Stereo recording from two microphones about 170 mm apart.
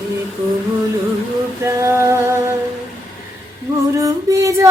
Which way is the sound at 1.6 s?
15° right (ahead or behind).